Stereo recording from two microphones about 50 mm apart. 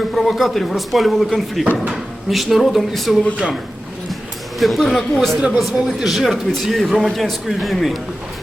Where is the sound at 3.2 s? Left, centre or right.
Left.